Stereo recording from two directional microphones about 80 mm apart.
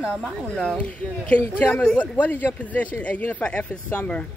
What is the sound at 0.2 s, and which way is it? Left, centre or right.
A man's voice, centre.